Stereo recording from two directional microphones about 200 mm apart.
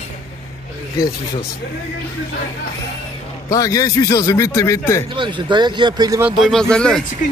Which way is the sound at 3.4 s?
15° left (ahead or behind).